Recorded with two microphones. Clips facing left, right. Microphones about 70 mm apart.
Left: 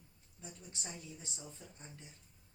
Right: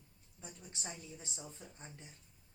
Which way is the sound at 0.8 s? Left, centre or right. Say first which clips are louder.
Right 1 dB; right.